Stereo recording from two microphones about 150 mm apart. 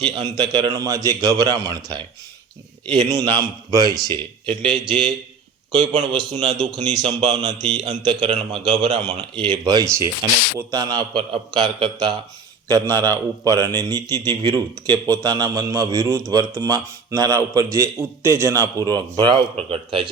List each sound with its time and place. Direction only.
0.0 s a man's voice: 30° right (ahead or behind)
7.2 s speech: 45° right (ahead or behind)
7.6 s a man's voice: 30° right (ahead or behind)
19.5 s a man's voice: 40° right (ahead or behind)